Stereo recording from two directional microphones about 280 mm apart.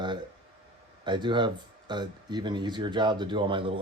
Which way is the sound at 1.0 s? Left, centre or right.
Centre.